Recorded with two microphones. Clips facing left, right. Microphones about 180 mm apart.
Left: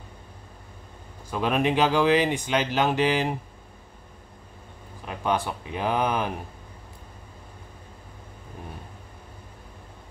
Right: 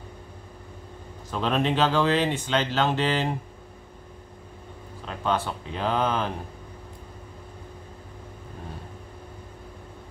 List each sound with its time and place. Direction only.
1.3 s speech: 10° left (ahead or behind)
5.0 s speech: 15° left (ahead or behind)